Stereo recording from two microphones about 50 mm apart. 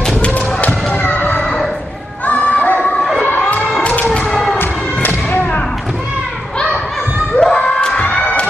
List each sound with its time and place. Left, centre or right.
0.2 s a sound: left
3.3 s music: left
4.6 s thump: left
7.3 s a sound: left
7.7 s crowd: centre
8.2 s children shouting: left